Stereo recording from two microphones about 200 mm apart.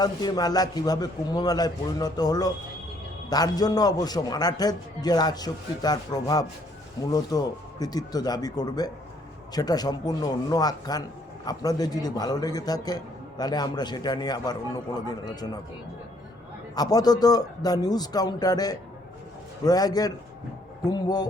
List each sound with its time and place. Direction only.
0.0 s a man's voice: 20° left (ahead or behind)
16.7 s a man's voice: 20° left (ahead or behind)